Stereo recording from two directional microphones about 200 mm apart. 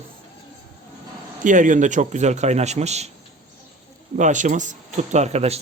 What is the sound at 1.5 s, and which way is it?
A man's voice, 40° right (ahead or behind).